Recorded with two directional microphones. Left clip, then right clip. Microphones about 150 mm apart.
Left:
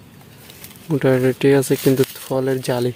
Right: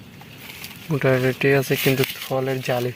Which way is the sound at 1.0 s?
35° left (ahead or behind).